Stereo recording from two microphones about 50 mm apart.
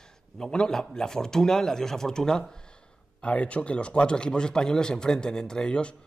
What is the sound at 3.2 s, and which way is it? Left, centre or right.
A man's voice, left.